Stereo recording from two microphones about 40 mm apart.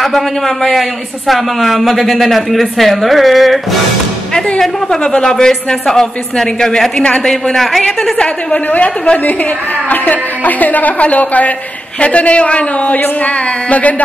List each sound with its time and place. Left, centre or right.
0.6 s a woman's voice: centre
4.6 s speech: centre
8.7 s a woman's voice: left